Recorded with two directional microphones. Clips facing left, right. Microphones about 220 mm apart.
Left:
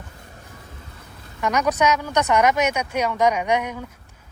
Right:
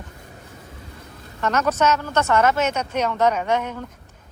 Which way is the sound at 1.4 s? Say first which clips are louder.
Even; 15° left (ahead or behind).